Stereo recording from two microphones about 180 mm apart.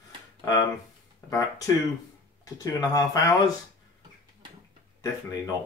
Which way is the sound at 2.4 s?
20° left (ahead or behind).